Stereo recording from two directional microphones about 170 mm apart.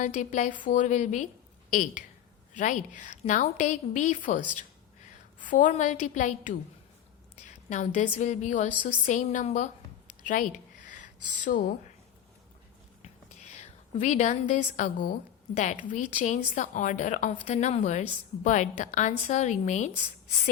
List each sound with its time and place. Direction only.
0.0 s a woman's voice: 45° left (ahead or behind)
5.4 s a woman's voice: 50° left (ahead or behind)
13.0 s a woman's voice: 40° left (ahead or behind)